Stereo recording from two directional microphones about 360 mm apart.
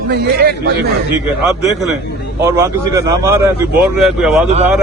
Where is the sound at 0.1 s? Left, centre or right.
Right.